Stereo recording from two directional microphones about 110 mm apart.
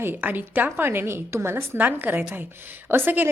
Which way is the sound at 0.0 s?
15° right (ahead or behind).